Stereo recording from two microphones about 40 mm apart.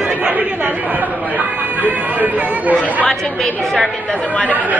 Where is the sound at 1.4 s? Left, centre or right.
Right.